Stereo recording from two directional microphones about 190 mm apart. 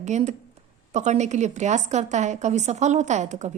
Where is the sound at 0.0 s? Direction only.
35° right (ahead or behind).